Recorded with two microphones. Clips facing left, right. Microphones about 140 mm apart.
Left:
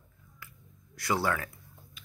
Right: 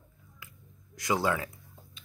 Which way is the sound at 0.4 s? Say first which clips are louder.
Left 1 dB; 15° right (ahead or behind).